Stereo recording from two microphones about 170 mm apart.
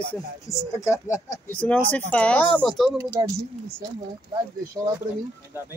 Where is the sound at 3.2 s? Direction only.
20° right (ahead or behind).